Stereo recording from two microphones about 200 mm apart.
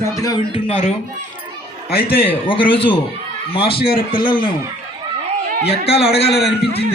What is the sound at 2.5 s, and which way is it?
A man's voice, 25° left (ahead or behind).